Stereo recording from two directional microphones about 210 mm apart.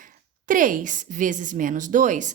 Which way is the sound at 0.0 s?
40° right (ahead or behind).